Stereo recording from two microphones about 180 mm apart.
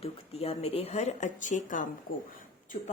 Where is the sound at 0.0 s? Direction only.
35° left (ahead or behind).